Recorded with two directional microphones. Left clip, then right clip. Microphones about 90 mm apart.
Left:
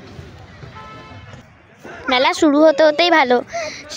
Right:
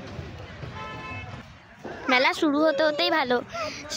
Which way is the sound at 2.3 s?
90° left.